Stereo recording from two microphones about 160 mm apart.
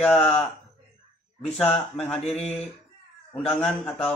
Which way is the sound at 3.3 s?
5° left (ahead or behind).